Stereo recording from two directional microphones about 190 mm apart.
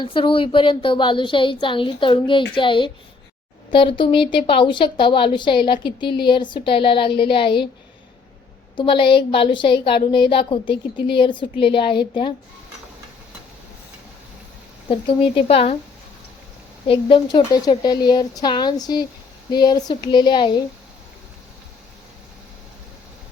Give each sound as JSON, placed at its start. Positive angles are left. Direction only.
{"t": 0.0, "sound": "speech", "side_deg": 25}
{"t": 8.7, "sound": "speech", "side_deg": 25}
{"t": 15.4, "sound": "speech", "side_deg": 30}
{"t": 16.8, "sound": "speech", "side_deg": 25}